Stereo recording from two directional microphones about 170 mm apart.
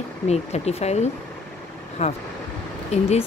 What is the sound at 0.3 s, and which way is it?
Speech, 40° left (ahead or behind).